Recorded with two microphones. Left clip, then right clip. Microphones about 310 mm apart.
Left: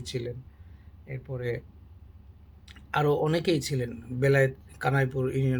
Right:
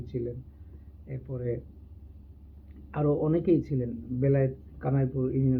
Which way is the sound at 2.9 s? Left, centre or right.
Left.